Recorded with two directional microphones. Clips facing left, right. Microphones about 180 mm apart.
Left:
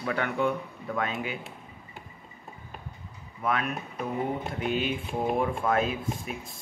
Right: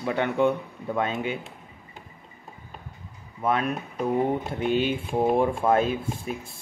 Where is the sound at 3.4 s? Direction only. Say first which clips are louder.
Right 4 dB; 30° right (ahead or behind).